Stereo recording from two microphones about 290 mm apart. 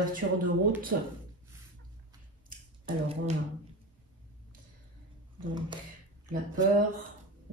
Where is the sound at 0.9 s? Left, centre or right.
Right.